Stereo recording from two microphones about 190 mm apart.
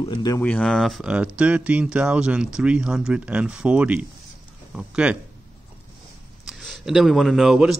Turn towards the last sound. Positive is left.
turn(degrees=0)  # may be behind; listen again after turning